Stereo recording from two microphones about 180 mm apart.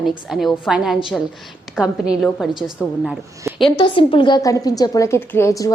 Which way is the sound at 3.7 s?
30° left (ahead or behind).